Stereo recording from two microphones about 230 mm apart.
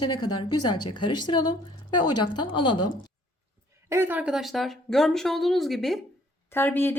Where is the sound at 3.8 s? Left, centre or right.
Centre.